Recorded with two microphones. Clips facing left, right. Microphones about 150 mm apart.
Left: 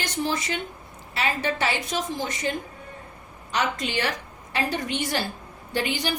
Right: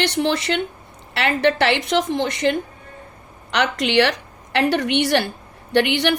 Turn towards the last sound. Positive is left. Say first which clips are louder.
# right 9 dB
turn(degrees=-70)  # may be behind; listen again after turning